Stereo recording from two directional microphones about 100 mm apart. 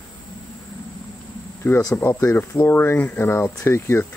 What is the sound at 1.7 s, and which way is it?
Speech, 20° left (ahead or behind).